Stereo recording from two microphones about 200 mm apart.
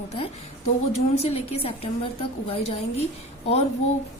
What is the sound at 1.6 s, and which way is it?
A woman's voice, 30° left (ahead or behind).